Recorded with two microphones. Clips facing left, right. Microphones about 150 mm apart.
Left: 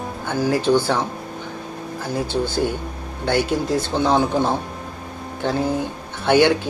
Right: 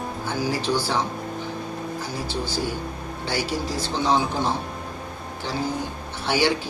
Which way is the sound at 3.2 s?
55° left (ahead or behind).